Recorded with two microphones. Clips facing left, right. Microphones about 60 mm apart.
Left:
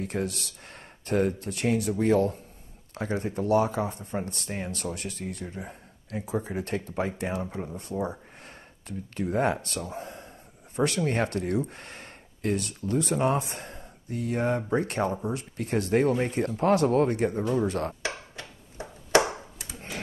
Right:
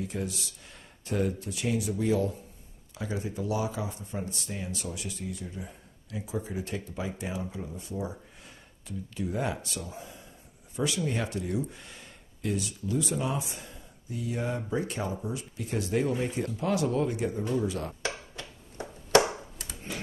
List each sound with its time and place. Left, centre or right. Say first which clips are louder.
0.0 s speech: left 4 dB; left